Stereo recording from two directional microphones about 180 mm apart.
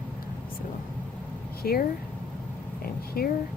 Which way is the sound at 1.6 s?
55° left (ahead or behind).